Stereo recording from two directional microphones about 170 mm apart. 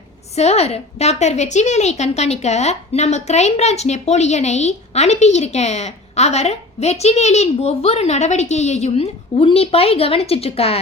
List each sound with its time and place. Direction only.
0.3 s a woman's voice: 40° left (ahead or behind)